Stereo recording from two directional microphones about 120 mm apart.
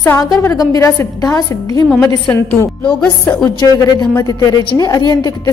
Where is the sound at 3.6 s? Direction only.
30° left (ahead or behind).